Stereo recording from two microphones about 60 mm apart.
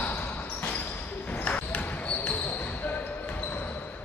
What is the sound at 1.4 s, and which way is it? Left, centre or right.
Basketball bounce, left.